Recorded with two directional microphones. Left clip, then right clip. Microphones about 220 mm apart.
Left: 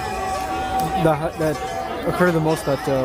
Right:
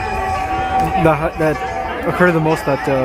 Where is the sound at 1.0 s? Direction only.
5° right (ahead or behind).